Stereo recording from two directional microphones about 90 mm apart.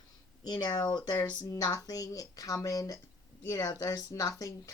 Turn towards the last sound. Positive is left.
turn(degrees=40)  # may be behind; listen again after turning